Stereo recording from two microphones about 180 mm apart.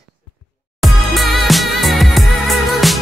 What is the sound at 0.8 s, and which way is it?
Music, centre (ahead or behind).